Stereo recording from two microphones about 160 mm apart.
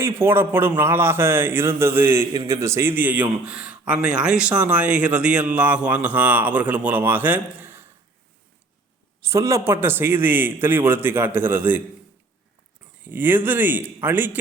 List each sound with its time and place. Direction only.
0.0 s a man's voice: 15° right (ahead or behind)
9.2 s a man's voice: 20° right (ahead or behind)
13.0 s a man's voice: 10° right (ahead or behind)